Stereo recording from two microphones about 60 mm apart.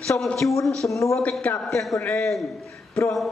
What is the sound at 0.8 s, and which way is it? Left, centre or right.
Speech, left.